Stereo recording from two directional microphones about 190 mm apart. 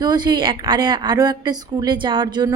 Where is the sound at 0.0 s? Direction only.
20° right (ahead or behind).